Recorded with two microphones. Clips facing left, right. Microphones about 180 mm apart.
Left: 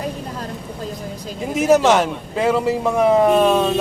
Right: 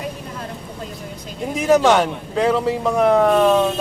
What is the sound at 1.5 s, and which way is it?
A man's voice, 5° left (ahead or behind).